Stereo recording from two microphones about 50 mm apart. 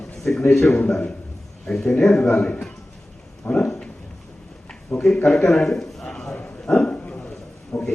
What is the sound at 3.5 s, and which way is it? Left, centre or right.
Speech, centre.